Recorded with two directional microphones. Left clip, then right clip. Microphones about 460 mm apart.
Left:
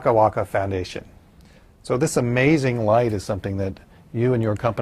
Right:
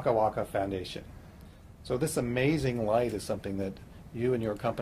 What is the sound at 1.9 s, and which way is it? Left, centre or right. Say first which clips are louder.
Speech: left 9 dB; left.